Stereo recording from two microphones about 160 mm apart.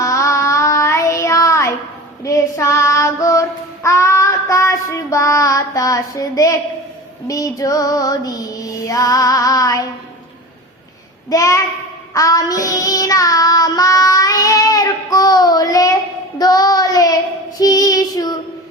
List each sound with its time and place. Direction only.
0.0 s child singing: 20° left (ahead or behind)
7.3 s music: 20° left (ahead or behind)
11.3 s music: 20° left (ahead or behind)
12.1 s child singing: 20° left (ahead or behind)